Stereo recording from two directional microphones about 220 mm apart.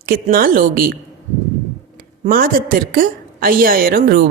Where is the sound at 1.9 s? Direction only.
40° right (ahead or behind).